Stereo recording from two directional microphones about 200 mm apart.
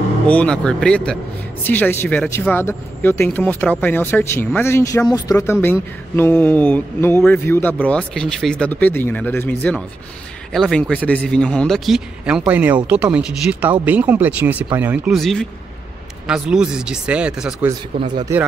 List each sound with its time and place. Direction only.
0.3 s speech: 5° left (ahead or behind)
18.1 s speech: 15° right (ahead or behind)